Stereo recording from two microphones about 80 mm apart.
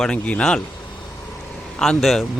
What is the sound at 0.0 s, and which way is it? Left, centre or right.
Speech, centre.